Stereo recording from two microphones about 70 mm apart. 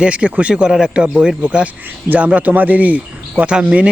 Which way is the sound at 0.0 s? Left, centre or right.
Centre.